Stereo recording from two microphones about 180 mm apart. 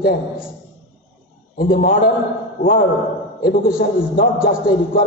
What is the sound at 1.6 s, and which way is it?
Speech, 55° left (ahead or behind).